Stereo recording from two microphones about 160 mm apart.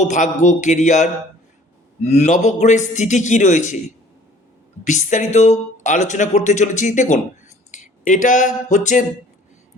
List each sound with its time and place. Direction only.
0.0 s speech: 50° left (ahead or behind)
4.9 s speech: 50° left (ahead or behind)